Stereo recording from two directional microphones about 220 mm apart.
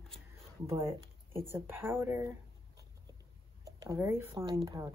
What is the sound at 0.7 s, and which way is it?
Speech, 15° right (ahead or behind).